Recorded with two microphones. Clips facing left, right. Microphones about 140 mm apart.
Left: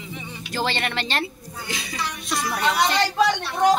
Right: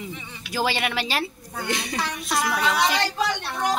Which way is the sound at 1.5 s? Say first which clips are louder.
Right 4 dB; 60° right (ahead or behind).